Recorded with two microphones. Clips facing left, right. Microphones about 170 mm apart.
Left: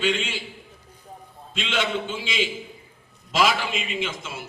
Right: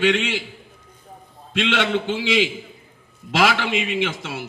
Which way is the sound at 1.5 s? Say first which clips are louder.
Right 5 dB; 70° right (ahead or behind).